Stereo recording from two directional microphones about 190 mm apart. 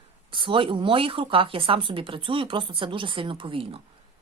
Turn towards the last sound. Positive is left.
turn(degrees=-25)  # may be behind; listen again after turning